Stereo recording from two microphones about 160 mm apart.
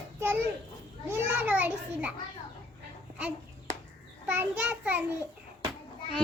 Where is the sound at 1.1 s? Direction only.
10° right (ahead or behind).